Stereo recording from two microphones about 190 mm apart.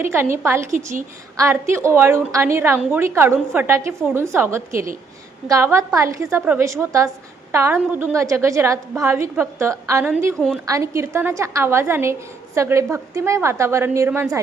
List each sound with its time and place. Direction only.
0.0 s a woman's voice: 10° right (ahead or behind)
1.7 s a woman's voice: 15° right (ahead or behind)